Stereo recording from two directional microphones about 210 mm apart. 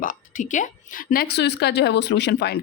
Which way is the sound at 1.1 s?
50° left (ahead or behind).